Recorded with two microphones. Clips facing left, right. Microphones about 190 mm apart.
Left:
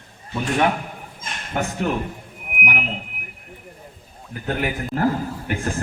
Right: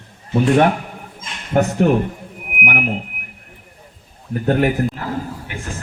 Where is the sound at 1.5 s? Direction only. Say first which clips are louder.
Right 9 dB; 50° right (ahead or behind).